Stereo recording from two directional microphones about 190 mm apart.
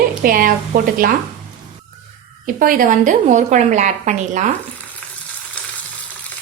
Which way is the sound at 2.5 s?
45° right (ahead or behind).